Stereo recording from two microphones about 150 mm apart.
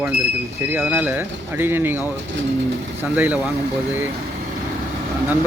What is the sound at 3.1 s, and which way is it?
Speech, 10° right (ahead or behind).